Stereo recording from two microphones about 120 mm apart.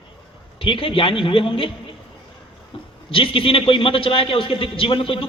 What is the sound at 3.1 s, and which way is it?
A man's voice, 50° left (ahead or behind).